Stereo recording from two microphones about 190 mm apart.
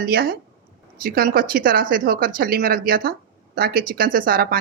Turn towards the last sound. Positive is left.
turn(degrees=-50)  # may be behind; listen again after turning